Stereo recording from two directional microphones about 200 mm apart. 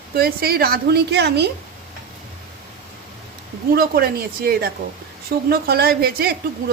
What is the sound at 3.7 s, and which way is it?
Speech, 50° right (ahead or behind).